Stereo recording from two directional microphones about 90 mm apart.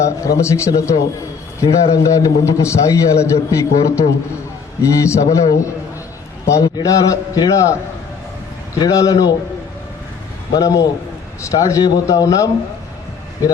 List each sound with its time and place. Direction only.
0.0 s a man's voice: 35° left (ahead or behind)
10.5 s a man's voice: 45° left (ahead or behind)